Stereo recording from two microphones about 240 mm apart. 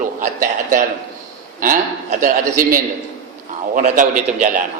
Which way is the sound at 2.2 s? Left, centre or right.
Right.